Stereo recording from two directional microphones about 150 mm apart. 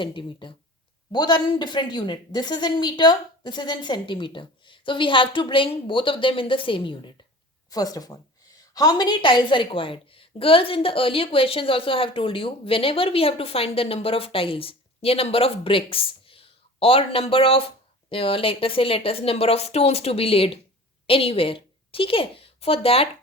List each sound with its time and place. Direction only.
0.0 s a woman's voice: 35° left (ahead or behind)
7.7 s a woman's voice: 25° left (ahead or behind); by 23.0 s 40° left (ahead or behind)